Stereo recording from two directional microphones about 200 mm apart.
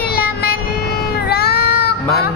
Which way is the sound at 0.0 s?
50° left (ahead or behind).